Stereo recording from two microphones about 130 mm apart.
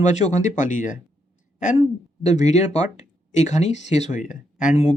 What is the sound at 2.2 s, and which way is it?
Speech, 65° left (ahead or behind).